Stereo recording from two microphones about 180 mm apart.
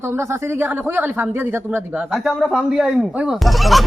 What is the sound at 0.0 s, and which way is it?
Speech, 15° right (ahead or behind).